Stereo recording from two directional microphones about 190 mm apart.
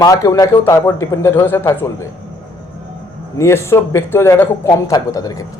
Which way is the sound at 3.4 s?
15° left (ahead or behind).